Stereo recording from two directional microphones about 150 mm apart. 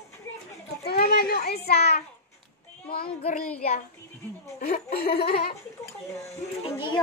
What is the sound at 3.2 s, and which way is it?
Child singing, 55° left (ahead or behind).